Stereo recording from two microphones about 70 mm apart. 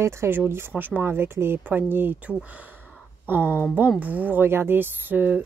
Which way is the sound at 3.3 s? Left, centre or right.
Right.